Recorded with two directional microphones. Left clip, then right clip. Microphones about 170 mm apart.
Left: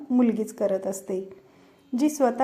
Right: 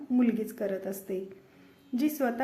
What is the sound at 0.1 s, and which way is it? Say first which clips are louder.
A woman's voice: left 5 dB; 25° left (ahead or behind).